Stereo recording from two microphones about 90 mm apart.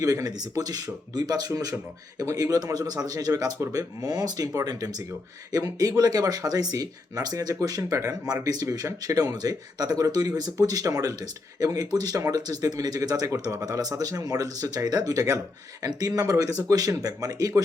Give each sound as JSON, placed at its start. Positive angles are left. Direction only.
{"t": 0.0, "sound": "speech", "side_deg": -40}